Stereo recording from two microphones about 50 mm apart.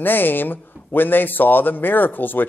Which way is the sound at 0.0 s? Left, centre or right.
Left.